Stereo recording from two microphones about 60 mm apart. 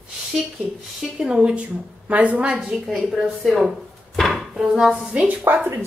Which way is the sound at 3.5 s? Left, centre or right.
Centre.